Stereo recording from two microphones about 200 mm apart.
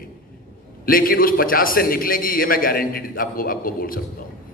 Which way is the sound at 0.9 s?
45° left (ahead or behind).